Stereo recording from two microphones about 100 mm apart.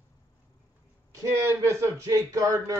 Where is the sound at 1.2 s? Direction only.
25° right (ahead or behind).